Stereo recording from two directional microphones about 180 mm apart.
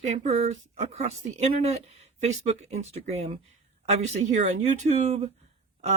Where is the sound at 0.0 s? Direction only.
40° right (ahead or behind).